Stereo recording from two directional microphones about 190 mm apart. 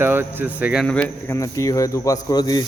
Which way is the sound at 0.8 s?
10° left (ahead or behind).